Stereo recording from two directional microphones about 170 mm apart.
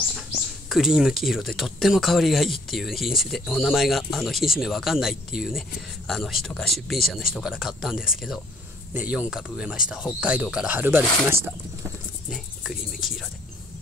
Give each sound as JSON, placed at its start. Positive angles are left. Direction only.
{"t": 0.7, "sound": "speech", "side_deg": 0}
{"t": 12.3, "sound": "speech", "side_deg": 0}